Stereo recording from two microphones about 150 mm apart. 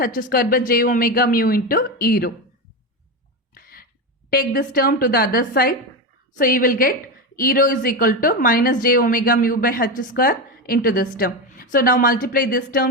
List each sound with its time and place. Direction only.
0.2 s speech: 85° left
0.7 s a woman's voice: 70° left (ahead or behind)
3.5 s a sound: 80° left
4.3 s a woman's voice: 80° left
6.3 s a woman's voice: 65° left (ahead or behind)